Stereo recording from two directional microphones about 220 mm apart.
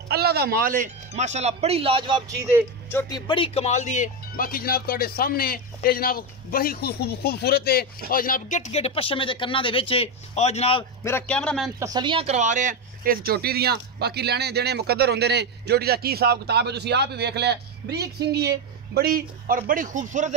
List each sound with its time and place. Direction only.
0.1 s speech: 45° right (ahead or behind); by 2.3 s 20° right (ahead or behind)
2.9 s speech: 15° left (ahead or behind)
11.1 s speech: 5° left (ahead or behind)
11.8 s speech: 20° right (ahead or behind); by 20.3 s 35° right (ahead or behind)